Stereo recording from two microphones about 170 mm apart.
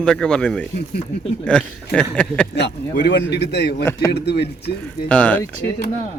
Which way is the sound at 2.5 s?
85° left.